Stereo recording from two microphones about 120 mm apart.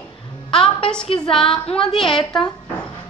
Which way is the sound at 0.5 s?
45° left (ahead or behind).